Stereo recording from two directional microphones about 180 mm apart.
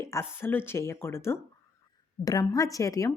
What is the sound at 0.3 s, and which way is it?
A woman's voice, 15° left (ahead or behind).